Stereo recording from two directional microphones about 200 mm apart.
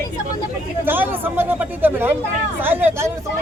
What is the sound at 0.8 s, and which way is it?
Speech, 10° right (ahead or behind).